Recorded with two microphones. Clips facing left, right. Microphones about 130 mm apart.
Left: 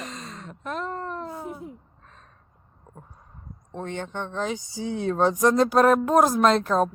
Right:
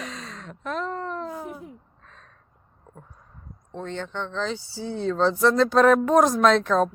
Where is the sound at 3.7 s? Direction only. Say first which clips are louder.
Even; 15° left (ahead or behind).